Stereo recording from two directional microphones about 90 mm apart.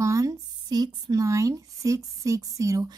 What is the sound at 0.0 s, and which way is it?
Speech, 40° right (ahead or behind).